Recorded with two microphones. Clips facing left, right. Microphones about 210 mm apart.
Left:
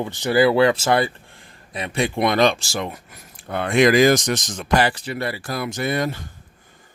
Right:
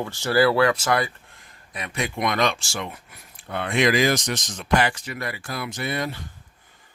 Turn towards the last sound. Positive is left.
turn(degrees=45)  # may be behind; listen again after turning